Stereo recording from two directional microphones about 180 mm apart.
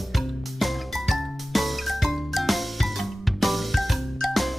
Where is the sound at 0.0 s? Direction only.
Centre (ahead or behind).